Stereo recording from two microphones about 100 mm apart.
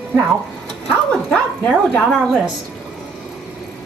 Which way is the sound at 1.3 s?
10° left (ahead or behind).